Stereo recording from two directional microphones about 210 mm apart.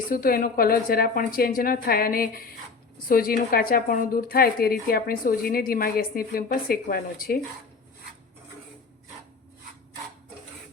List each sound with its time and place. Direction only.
0.1 s a woman's voice: 45° left (ahead or behind)